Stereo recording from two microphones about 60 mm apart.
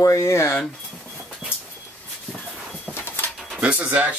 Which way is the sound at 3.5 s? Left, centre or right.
Right.